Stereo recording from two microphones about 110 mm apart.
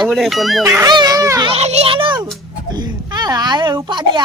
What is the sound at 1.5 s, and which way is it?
A child's voice, 75° right (ahead or behind).